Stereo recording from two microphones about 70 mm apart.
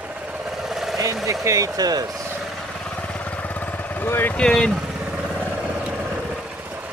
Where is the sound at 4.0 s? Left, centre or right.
Left.